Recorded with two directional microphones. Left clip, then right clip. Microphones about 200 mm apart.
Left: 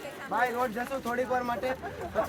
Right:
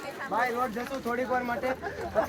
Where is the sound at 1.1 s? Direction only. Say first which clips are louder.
Right 1 dB; 20° left (ahead or behind).